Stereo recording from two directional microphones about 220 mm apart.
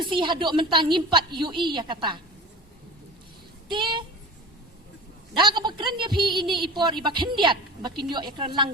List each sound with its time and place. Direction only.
0.0 s speech: 20° right (ahead or behind)
3.7 s speech: 20° right (ahead or behind)
5.4 s speech: 20° right (ahead or behind)